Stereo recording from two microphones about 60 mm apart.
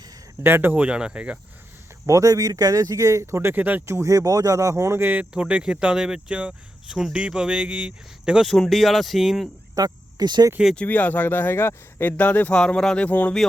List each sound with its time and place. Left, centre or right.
0.4 s speech: right; by 1.4 s centre
2.0 s speech: right
3.5 s speech: right
3.8 s speech: right
4.9 s speech: right
5.3 s speech: centre
8.5 s speech: centre
9.7 s speech: right
10.8 s speech: left
12.1 s speech: left
12.5 s speech: centre
13.1 s speech: left